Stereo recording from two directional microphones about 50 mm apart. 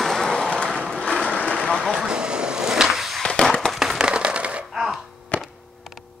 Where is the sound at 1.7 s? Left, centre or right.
Centre.